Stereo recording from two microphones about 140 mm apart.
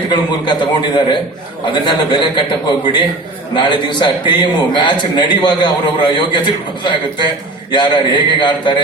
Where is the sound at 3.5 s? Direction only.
35° left (ahead or behind).